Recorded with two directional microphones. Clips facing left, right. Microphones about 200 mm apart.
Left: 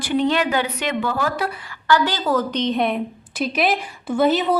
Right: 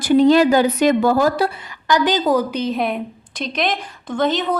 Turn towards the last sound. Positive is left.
turn(degrees=10)  # may be behind; listen again after turning